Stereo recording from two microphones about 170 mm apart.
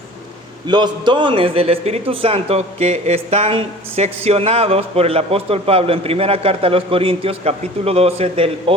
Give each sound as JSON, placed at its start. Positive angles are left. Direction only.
{"t": 0.7, "sound": "a man's voice", "side_deg": -25}